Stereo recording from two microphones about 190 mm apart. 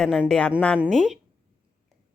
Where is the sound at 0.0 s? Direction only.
Centre (ahead or behind).